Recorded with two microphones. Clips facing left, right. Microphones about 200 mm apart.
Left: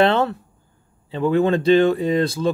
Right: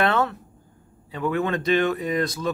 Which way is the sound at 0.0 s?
25° left (ahead or behind).